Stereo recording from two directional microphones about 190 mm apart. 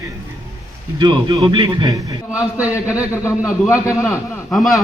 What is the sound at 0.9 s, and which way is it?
Speech, 25° right (ahead or behind).